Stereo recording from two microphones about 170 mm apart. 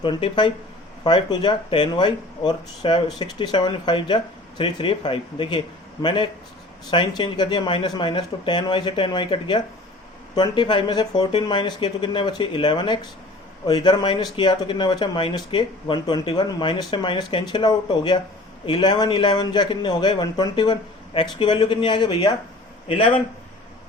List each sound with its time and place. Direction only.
0.0 s speech: 30° left (ahead or behind)